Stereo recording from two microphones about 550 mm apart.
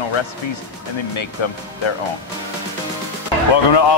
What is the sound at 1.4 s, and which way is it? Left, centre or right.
Speech, left.